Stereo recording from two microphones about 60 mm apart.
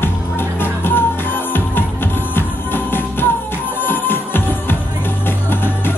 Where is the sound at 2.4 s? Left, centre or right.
Left.